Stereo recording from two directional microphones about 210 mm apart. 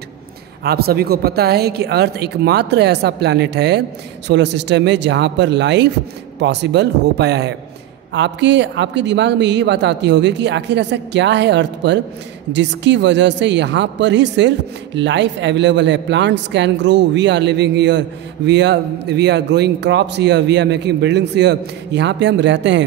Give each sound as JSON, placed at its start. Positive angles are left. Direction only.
{"t": 0.7, "sound": "a man's voice", "side_deg": -45}